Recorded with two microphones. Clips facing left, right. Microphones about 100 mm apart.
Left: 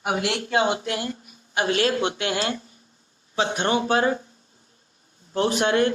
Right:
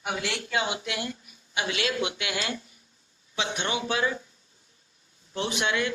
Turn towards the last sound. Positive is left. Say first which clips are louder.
# left 7 dB
turn(degrees=45)  # may be behind; listen again after turning